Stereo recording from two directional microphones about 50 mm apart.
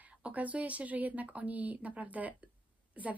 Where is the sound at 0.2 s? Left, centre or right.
Right.